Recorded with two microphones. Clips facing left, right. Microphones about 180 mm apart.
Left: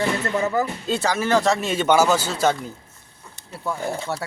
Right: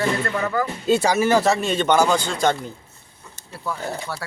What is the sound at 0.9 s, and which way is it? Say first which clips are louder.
Speech: right 4 dB; 10° right (ahead or behind).